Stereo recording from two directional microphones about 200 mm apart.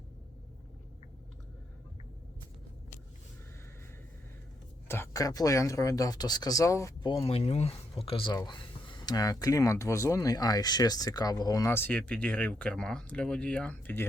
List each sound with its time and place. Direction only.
4.9 s speech: 15° left (ahead or behind)
7.1 s speech: 30° left (ahead or behind); by 14.1 s 10° left (ahead or behind)